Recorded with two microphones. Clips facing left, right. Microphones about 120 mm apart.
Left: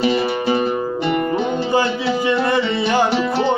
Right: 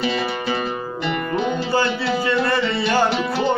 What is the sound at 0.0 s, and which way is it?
Music, 20° left (ahead or behind).